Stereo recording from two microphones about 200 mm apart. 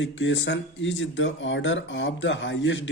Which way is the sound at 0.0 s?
65° left (ahead or behind).